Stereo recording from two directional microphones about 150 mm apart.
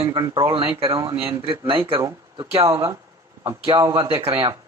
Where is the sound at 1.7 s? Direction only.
35° right (ahead or behind).